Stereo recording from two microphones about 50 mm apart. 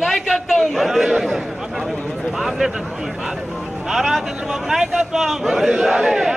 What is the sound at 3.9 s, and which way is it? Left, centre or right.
A man's voice, centre.